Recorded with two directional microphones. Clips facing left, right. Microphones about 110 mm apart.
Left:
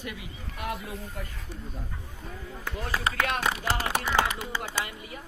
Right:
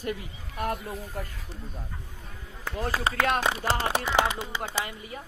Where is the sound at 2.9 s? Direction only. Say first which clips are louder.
Right 2 dB; 25° right (ahead or behind).